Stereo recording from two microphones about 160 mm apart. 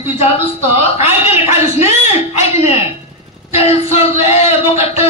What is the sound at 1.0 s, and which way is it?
Speech, 15° right (ahead or behind).